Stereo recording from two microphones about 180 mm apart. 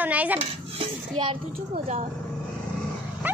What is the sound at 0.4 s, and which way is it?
A child's voice, 30° right (ahead or behind).